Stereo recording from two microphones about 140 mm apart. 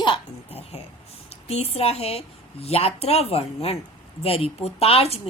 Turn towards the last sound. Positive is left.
turn(degrees=45)  # may be behind; listen again after turning